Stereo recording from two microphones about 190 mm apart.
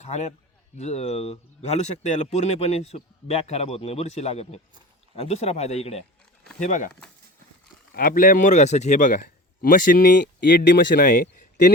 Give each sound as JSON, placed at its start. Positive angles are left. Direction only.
{"t": 0.0, "sound": "a man's voice", "side_deg": 35}
{"t": 7.9, "sound": "a man's voice", "side_deg": 50}
{"t": 10.7, "sound": "a man's voice", "side_deg": 55}